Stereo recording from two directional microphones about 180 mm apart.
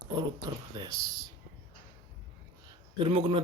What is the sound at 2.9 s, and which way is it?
Speech, 30° right (ahead or behind).